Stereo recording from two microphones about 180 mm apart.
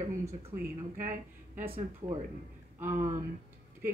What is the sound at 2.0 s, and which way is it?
Speech, 35° right (ahead or behind).